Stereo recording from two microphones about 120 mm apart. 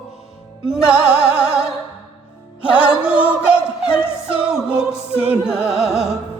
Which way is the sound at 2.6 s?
10° right (ahead or behind).